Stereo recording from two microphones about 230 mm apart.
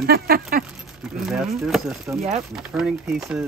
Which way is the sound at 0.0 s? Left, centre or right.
Right.